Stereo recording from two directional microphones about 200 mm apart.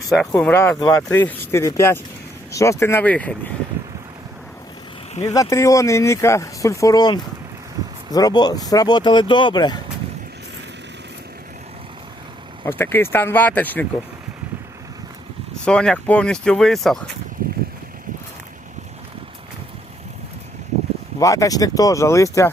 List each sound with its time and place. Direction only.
0.1 s speech: 5° left (ahead or behind)
5.3 s speech: 15° left (ahead or behind)
12.6 s speech: 10° left (ahead or behind)
15.6 s speech: 5° left (ahead or behind)
21.2 s speech: 15° left (ahead or behind)